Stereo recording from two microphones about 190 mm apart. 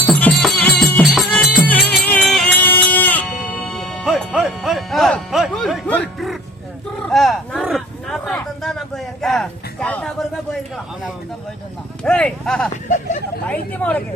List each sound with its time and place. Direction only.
0.1 s music: 5° left (ahead or behind)
7.1 s a sound: centre (ahead or behind)
12.0 s speech: 5° left (ahead or behind)
12.7 s speech: 40° left (ahead or behind)
13.5 s speech: 10° left (ahead or behind)